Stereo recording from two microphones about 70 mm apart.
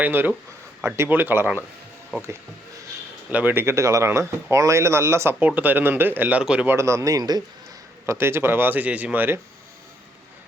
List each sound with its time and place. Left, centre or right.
0.0 s speech: right
2.1 s speech: centre
3.2 s speech: right
3.5 s speech: right
5.4 s speech: right
6.4 s speech: centre
6.7 s a man's voice: right
8.0 s speech: right